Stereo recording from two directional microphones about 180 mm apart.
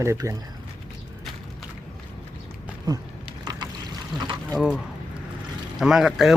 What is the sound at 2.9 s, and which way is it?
Speech, 20° right (ahead or behind).